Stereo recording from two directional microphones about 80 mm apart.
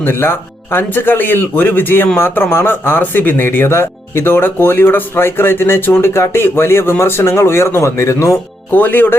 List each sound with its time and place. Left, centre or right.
0.0 s speech: left
8.7 s speech: left